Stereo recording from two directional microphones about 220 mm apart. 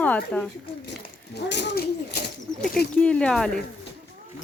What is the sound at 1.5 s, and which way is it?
Speech, 50° left (ahead or behind).